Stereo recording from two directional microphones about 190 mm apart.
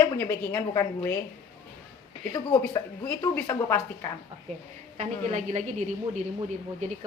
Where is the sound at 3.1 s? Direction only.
10° left (ahead or behind).